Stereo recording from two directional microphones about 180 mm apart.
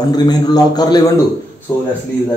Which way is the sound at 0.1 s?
20° left (ahead or behind).